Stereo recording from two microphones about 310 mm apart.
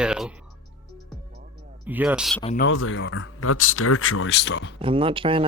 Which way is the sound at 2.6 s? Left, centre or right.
Left.